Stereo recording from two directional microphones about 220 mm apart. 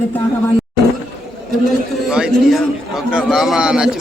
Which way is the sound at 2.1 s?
Centre (ahead or behind).